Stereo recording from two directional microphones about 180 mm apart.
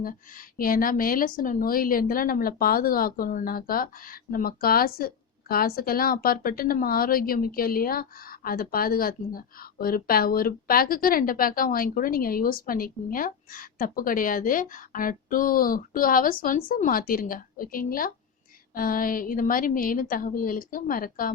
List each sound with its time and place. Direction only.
0.0 s speech: 50° left (ahead or behind)